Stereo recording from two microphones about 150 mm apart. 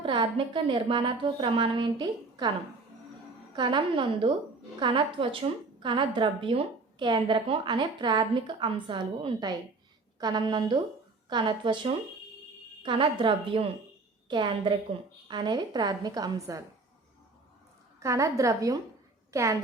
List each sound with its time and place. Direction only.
0.0 s a woman's voice: 35° right (ahead or behind)
3.5 s a woman's voice: 30° right (ahead or behind)
18.0 s a woman's voice: 20° right (ahead or behind)